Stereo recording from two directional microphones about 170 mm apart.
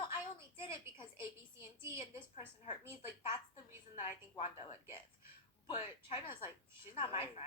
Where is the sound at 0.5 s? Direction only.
30° left (ahead or behind).